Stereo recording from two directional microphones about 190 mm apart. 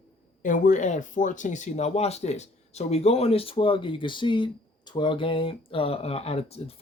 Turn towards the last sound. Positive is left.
turn(degrees=30)  # may be behind; listen again after turning